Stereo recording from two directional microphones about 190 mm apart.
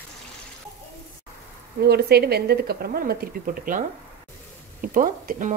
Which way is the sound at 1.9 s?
55° right (ahead or behind).